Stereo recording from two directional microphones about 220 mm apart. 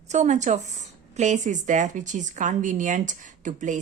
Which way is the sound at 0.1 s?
30° right (ahead or behind).